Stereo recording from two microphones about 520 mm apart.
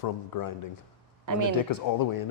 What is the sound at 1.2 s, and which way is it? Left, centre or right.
Speech, right.